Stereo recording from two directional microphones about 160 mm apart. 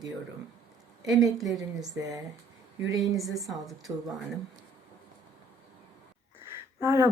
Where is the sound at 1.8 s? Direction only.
20° right (ahead or behind).